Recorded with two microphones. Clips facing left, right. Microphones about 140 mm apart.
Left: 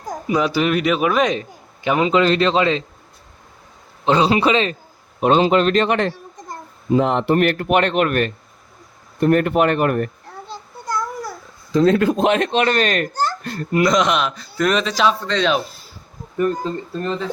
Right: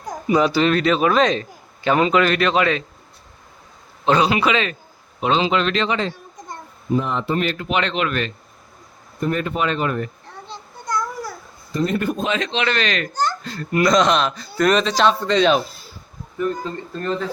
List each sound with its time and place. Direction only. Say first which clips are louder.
0.0 s a man's voice: right 2 dB; centre (ahead or behind)
2.1 s speech: left 2 dB; 25° left (ahead or behind)
4.0 s a man's voice: left 2 dB; 25° left (ahead or behind)
5.2 s a man's voice: left 4 dB; 45° left (ahead or behind)
6.9 s speech: left 5 dB; 80° left; by 8.3 s 50° left (ahead or behind)
9.2 s speech: left 6 dB; 65° left (ahead or behind)
10.5 s a sound: even; 5° left (ahead or behind)
11.7 s speech: left 7 dB; 90° left; by 13.1 s 45° left (ahead or behind)
13.7 s speech: even; 15° left (ahead or behind); by 15.6 s 5° right (ahead or behind)